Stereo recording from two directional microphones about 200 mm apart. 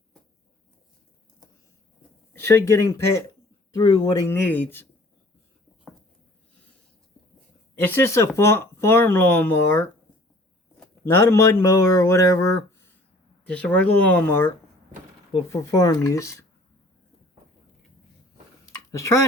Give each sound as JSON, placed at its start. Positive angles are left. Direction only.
{"t": 2.6, "sound": "speech", "side_deg": -55}
{"t": 3.8, "sound": "speech", "side_deg": 20}
{"t": 4.3, "sound": "speech", "side_deg": 10}
{"t": 7.9, "sound": "speech", "side_deg": 10}
{"t": 13.5, "sound": "speech", "side_deg": 5}
{"t": 15.5, "sound": "speech", "side_deg": 15}
{"t": 18.9, "sound": "speech", "side_deg": 15}